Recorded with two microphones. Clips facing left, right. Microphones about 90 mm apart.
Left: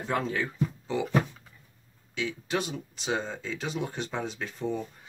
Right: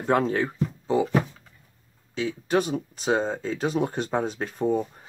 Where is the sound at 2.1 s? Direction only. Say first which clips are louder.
Right 6 dB; 45° right (ahead or behind).